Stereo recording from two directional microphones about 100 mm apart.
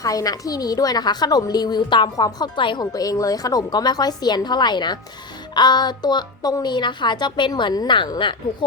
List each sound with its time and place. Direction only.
0.0 s a woman's voice: 35° left (ahead or behind); by 2.8 s 50° left (ahead or behind)
2.8 s a woman's voice: 35° left (ahead or behind)